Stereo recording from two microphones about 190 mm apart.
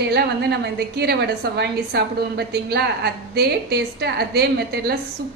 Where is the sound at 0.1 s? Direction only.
60° right (ahead or behind).